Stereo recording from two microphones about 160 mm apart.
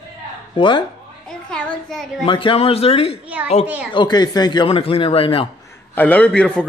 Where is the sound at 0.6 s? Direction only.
30° left (ahead or behind).